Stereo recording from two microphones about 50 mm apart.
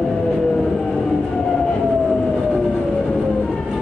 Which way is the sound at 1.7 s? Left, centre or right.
Centre.